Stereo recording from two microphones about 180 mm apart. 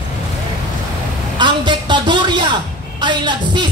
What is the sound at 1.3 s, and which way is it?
Speech, 25° right (ahead or behind).